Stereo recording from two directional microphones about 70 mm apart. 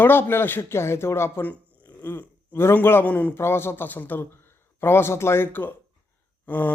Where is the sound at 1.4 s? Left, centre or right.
Left.